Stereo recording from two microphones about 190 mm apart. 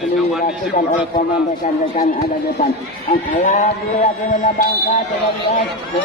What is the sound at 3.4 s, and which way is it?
Speech, 40° left (ahead or behind).